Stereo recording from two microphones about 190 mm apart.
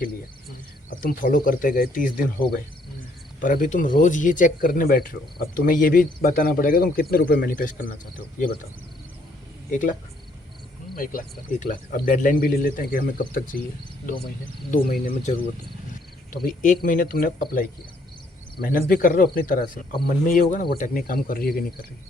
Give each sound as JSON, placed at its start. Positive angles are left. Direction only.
{"t": 0.9, "sound": "a man's voice", "side_deg": 45}
{"t": 10.9, "sound": "cricket", "side_deg": 50}
{"t": 11.6, "sound": "a man's voice", "side_deg": 45}
{"t": 16.3, "sound": "a man's voice", "side_deg": 45}